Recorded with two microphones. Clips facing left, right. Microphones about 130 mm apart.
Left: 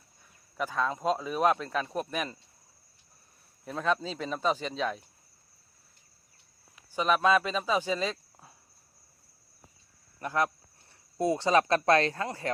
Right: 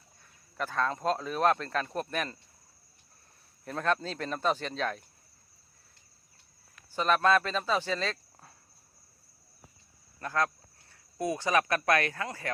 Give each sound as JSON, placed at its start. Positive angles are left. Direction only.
{"t": 0.5, "sound": "speech", "side_deg": 5}
{"t": 3.6, "sound": "speech", "side_deg": 0}
{"t": 6.7, "sound": "speech", "side_deg": 10}
{"t": 10.2, "sound": "speech", "side_deg": 20}